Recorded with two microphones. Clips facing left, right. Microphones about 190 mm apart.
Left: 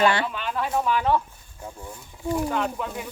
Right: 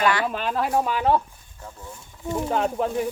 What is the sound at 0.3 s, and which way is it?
Speech, 40° right (ahead or behind).